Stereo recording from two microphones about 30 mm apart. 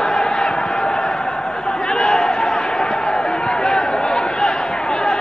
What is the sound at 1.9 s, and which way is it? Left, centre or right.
Crowd, left.